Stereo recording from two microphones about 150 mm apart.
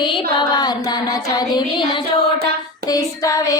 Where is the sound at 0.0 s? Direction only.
35° left (ahead or behind).